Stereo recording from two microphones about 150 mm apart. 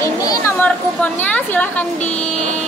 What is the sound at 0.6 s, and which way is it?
Speech, 10° left (ahead or behind).